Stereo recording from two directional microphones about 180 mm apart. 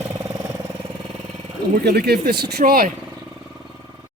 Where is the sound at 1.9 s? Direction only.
60° right (ahead or behind).